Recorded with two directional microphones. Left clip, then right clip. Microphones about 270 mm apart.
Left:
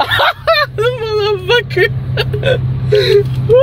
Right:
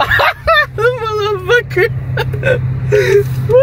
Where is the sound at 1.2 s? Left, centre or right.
Right.